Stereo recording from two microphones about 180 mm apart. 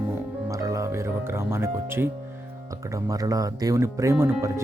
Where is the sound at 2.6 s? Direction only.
20° right (ahead or behind).